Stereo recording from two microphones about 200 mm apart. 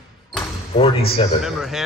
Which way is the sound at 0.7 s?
30° left (ahead or behind).